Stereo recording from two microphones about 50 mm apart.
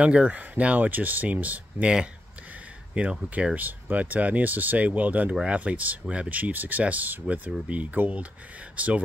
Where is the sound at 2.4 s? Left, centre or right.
Right.